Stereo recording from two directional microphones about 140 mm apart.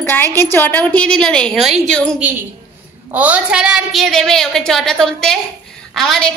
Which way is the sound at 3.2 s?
10° right (ahead or behind).